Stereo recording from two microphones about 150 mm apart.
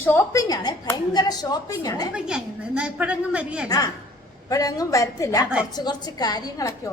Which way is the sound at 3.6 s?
25° left (ahead or behind).